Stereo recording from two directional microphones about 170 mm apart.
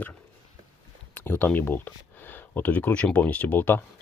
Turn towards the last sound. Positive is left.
turn(degrees=10)  # may be behind; listen again after turning